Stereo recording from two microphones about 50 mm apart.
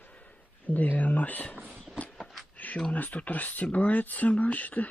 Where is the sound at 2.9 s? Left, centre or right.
Left.